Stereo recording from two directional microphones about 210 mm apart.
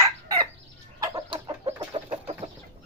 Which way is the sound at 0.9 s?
15° right (ahead or behind).